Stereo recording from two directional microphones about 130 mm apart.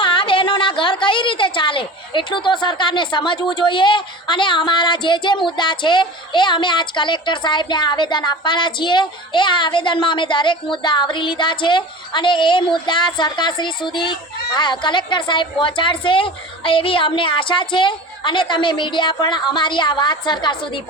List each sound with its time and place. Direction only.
0.0 s a woman's voice: 40° left (ahead or behind)